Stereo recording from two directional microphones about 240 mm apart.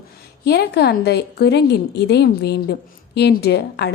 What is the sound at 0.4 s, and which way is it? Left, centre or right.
A woman's voice, left.